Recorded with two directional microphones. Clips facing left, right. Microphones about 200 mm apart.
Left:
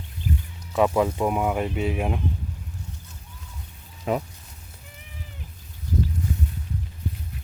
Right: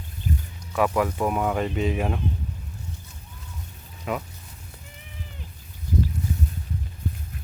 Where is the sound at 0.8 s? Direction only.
20° left (ahead or behind).